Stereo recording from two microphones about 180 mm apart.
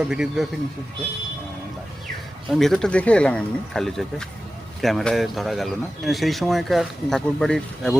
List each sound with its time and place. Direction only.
0.0 s speech: 5° right (ahead or behind)
2.5 s speech: centre (ahead or behind)